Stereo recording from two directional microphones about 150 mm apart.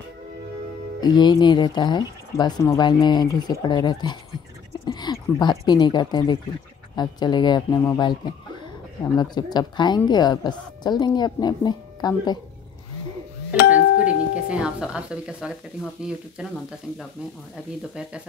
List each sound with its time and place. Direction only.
1.0 s speech: 30° left (ahead or behind)
4.8 s a sound: 30° left (ahead or behind)
5.4 s speech: 30° left (ahead or behind)
13.7 s speech: 10° right (ahead or behind)